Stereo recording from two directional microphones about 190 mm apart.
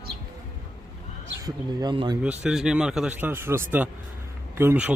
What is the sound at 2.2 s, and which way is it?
Speech, 5° right (ahead or behind).